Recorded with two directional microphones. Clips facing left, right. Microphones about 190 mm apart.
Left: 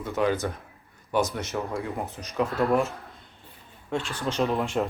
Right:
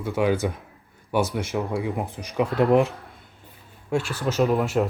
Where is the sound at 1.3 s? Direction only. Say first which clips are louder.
Right 4 dB; 10° right (ahead or behind).